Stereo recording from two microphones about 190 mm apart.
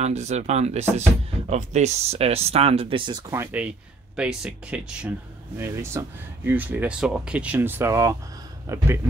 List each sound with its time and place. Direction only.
0.0 s speech: 35° right (ahead or behind); by 8.8 s 15° right (ahead or behind)